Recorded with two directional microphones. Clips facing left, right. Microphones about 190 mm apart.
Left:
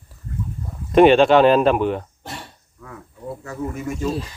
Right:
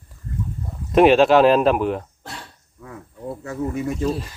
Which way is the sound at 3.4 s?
35° right (ahead or behind).